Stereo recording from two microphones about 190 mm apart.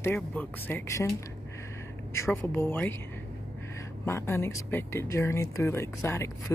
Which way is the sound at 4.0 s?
15° left (ahead or behind).